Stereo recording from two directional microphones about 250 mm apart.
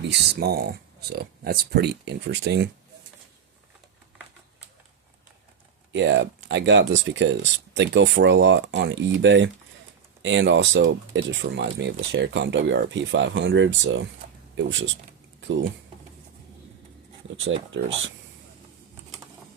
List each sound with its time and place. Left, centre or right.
0.1 s speech: right
5.9 s speech: right
17.7 s speech: right